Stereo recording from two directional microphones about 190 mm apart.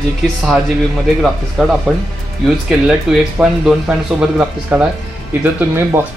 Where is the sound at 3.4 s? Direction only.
5° right (ahead or behind).